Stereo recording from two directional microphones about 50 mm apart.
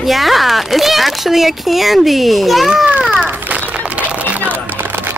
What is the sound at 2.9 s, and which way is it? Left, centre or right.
Children playing, right.